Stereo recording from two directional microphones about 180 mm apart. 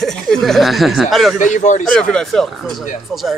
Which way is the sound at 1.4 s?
45° left (ahead or behind).